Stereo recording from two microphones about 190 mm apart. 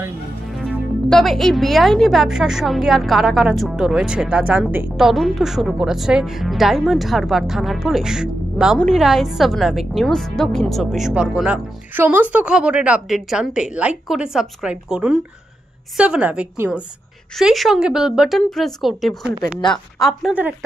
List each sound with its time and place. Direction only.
0.7 s a woman's voice: 5° left (ahead or behind)